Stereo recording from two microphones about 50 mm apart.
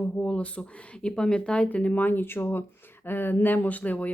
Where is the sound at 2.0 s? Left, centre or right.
Left.